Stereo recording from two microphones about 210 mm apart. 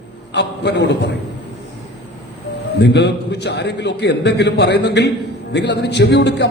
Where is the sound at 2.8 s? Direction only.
55° left (ahead or behind).